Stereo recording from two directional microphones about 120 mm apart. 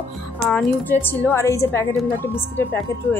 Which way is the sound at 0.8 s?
15° left (ahead or behind).